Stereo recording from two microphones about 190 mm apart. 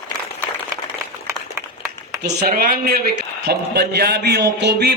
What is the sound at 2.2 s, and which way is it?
A man's voice, 55° right (ahead or behind).